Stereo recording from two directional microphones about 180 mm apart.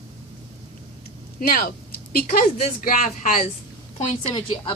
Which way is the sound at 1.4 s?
50° left (ahead or behind).